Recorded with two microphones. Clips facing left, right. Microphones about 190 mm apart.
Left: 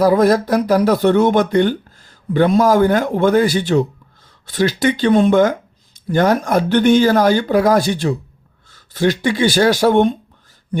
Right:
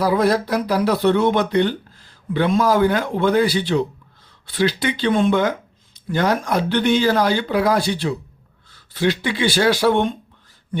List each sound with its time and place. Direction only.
0.0 s speech: 45° left (ahead or behind)